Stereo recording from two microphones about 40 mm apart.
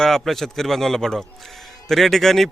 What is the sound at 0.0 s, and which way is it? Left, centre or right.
Speech, centre.